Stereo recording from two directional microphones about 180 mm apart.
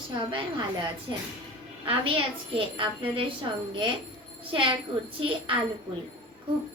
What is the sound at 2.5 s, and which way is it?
Speech, 30° right (ahead or behind).